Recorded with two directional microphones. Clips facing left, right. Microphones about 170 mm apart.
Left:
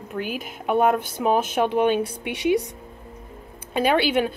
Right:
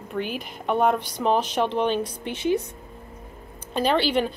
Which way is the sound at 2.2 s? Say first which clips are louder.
Left 2 dB; 70° left (ahead or behind).